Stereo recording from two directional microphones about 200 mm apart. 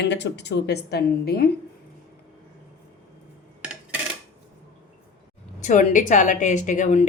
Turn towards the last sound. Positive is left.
turn(degrees=40)  # may be behind; listen again after turning